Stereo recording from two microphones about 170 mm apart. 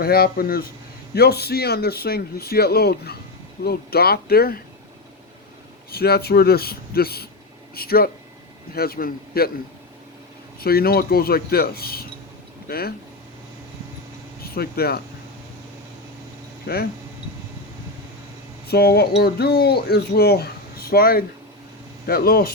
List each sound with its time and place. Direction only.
0.0 s speech: 65° left (ahead or behind)
5.9 s speech: 65° left (ahead or behind)
10.6 s speech: 65° left (ahead or behind)
14.4 s speech: 65° left (ahead or behind)
16.7 s speech: 70° left (ahead or behind)
18.7 s speech: 70° left (ahead or behind)